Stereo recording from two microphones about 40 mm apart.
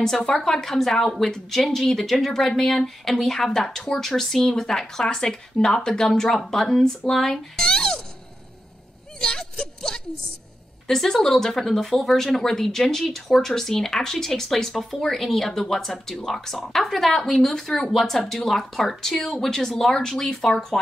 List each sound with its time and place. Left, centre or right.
0.0 s speech: centre
6.2 s speech: centre
7.6 s music: centre
9.2 s a sound: centre
10.9 s speech: centre